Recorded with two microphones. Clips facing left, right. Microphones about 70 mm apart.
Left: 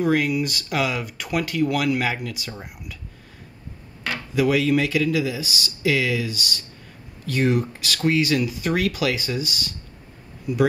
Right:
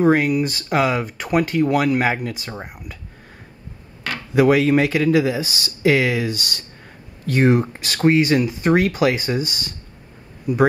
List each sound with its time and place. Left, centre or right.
0.0 s speech: right
4.4 s speech: right